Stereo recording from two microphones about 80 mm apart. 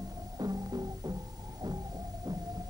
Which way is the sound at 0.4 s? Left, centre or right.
Right.